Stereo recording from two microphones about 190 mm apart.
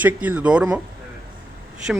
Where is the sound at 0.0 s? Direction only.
10° right (ahead or behind).